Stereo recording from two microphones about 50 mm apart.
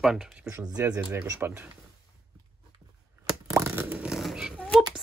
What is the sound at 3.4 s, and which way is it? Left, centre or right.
Plop, right.